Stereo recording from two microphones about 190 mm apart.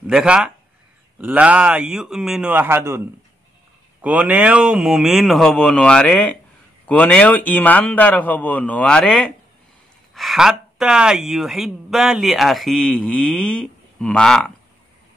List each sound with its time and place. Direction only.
0.0 s speech: 5° right (ahead or behind)
4.0 s a man's voice: 5° right (ahead or behind)